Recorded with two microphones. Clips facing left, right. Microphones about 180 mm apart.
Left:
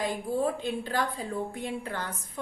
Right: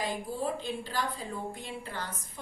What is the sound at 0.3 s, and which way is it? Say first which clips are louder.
A woman's voice: left 5 dB; 55° left (ahead or behind).